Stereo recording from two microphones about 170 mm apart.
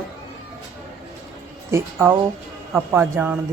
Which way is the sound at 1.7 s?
15° right (ahead or behind).